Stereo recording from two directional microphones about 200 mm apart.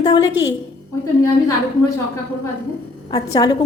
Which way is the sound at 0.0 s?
20° left (ahead or behind).